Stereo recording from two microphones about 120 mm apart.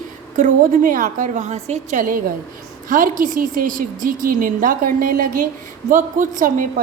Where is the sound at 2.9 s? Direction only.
90° right.